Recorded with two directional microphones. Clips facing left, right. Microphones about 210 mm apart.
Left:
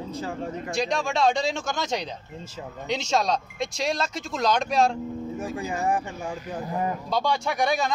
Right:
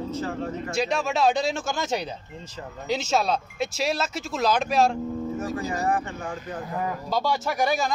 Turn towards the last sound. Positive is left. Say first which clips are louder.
# even
turn(degrees=-5)  # may be behind; listen again after turning